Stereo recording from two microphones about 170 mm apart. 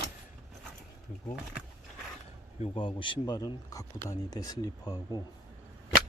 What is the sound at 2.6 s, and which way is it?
Speech, 30° left (ahead or behind).